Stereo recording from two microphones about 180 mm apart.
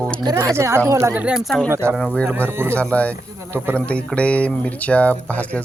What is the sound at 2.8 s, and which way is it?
Speech, 5° left (ahead or behind).